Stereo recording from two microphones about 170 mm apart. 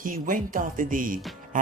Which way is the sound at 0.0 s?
55° right (ahead or behind).